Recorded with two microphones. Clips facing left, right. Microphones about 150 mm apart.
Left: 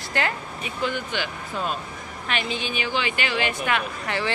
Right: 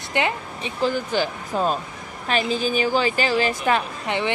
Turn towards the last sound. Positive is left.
turn(degrees=-20)  # may be behind; listen again after turning